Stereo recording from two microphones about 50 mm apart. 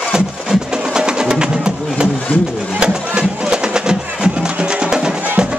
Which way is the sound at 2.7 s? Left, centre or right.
Centre.